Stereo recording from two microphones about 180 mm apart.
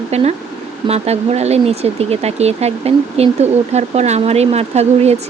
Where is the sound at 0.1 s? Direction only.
35° right (ahead or behind).